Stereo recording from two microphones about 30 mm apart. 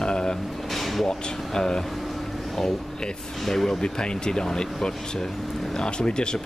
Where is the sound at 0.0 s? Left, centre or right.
Left.